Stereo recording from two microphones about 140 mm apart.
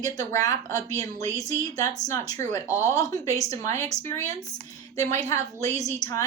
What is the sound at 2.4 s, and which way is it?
Speech, 60° right (ahead or behind).